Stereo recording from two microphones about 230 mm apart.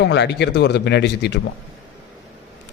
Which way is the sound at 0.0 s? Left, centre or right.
Left.